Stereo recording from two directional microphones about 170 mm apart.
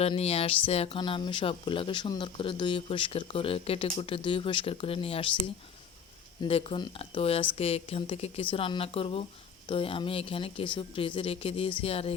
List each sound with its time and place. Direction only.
0.0 s speech: 35° left (ahead or behind)
6.4 s speech: 35° left (ahead or behind)